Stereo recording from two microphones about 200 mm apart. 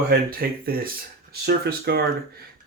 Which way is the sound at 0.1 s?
50° right (ahead or behind).